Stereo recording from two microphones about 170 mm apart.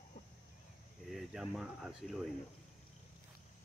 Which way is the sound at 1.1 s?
Centre (ahead or behind).